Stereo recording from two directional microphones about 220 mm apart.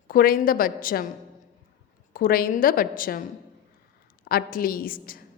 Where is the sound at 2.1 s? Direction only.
40° left (ahead or behind).